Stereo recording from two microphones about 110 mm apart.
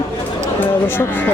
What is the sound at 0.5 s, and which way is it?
Speech, 15° left (ahead or behind).